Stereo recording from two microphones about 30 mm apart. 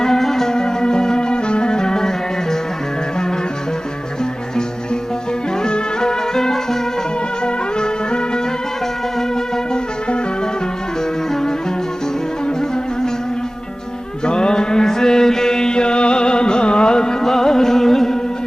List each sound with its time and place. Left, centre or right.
0.0 s music: centre
5.6 s music: left
7.4 s music: left
14.3 s mantra: left
17.2 s music: centre